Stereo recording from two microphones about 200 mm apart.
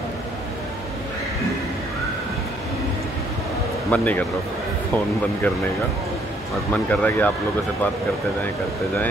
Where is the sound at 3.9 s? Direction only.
10° left (ahead or behind).